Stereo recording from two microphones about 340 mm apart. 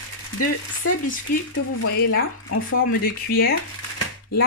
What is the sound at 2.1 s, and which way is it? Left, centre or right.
Speech, left.